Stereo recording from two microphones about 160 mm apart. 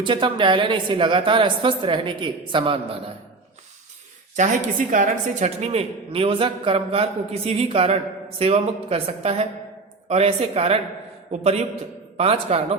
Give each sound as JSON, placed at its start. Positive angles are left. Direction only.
{"t": 0.0, "sound": "a woman's voice", "side_deg": -30}
{"t": 4.4, "sound": "a woman's voice", "side_deg": -55}